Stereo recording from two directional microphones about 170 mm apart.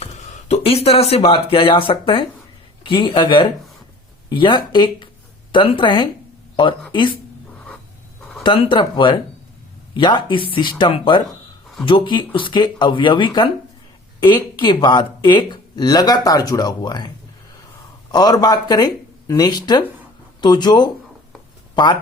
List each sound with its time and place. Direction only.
0.0 s speech: 40° left (ahead or behind)
8.4 s speech: 30° left (ahead or behind)
18.1 s speech: 20° left (ahead or behind)